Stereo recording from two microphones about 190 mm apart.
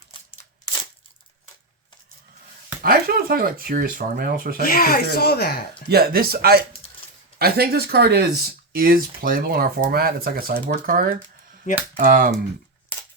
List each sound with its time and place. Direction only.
2.8 s speech: 50° right (ahead or behind)
4.6 s speech: 50° left (ahead or behind)
5.9 s speech: 50° right (ahead or behind)